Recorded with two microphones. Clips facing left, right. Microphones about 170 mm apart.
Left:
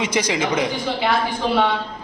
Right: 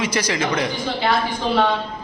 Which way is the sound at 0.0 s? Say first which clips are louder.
Left 1 dB; 20° left (ahead or behind).